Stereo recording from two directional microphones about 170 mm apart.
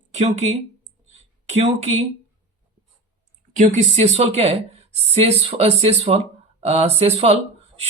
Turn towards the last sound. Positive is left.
turn(degrees=-40)  # may be behind; listen again after turning